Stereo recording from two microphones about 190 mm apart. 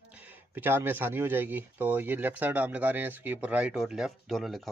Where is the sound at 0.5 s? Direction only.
10° right (ahead or behind).